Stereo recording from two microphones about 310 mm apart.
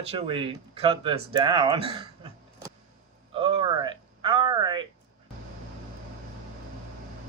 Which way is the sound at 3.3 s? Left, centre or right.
Centre.